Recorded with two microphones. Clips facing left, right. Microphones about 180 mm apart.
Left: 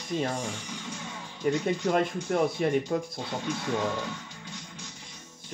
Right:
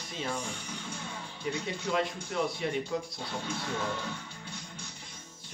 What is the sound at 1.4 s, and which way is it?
Speech, 50° left (ahead or behind).